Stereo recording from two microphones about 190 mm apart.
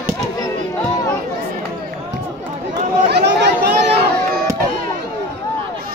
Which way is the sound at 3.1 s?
60° right (ahead or behind).